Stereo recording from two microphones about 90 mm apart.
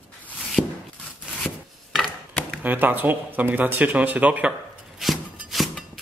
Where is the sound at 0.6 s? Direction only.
5° right (ahead or behind).